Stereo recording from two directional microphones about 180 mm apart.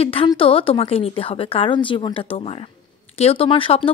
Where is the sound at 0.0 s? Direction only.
30° left (ahead or behind).